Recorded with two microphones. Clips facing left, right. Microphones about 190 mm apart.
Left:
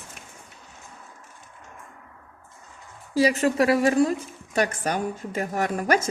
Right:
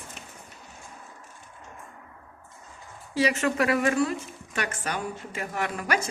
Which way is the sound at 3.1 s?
40° left (ahead or behind).